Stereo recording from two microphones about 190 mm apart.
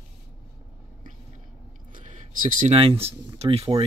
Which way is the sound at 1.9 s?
45° right (ahead or behind).